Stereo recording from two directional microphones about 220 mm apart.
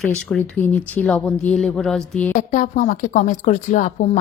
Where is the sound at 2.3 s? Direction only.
35° left (ahead or behind).